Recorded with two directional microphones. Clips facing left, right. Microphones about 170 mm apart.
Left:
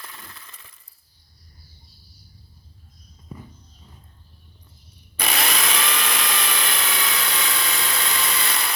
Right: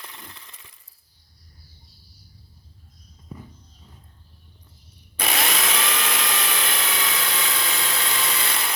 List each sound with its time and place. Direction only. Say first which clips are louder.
0.0 s coin: even; 20° right (ahead or behind)
5.1 s tools: even; 25° right (ahead or behind)